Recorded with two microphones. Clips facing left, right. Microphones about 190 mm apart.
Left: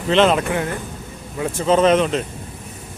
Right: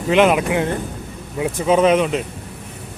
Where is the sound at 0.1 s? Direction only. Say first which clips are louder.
Right 1 dB; 10° right (ahead or behind).